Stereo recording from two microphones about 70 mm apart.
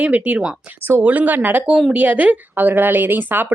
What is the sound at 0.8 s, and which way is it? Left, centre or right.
Speech, right.